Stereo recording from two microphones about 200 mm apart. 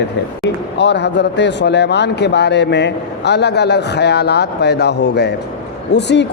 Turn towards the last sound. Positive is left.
turn(degrees=60)  # may be behind; listen again after turning